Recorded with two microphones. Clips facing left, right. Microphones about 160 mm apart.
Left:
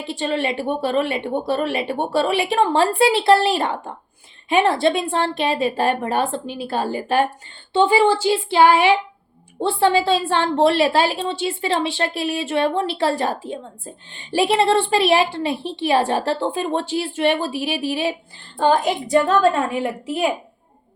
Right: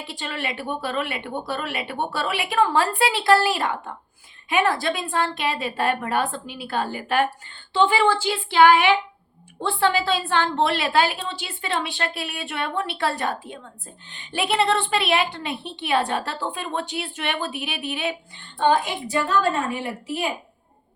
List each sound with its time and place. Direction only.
0.0 s a woman's voice: 25° left (ahead or behind)
18.7 s a woman's voice: 45° left (ahead or behind)